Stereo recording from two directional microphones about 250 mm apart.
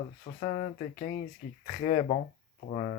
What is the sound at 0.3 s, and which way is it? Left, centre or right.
Speech, left.